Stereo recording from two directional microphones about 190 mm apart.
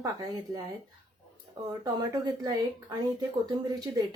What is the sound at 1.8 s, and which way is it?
Speech, 20° right (ahead or behind).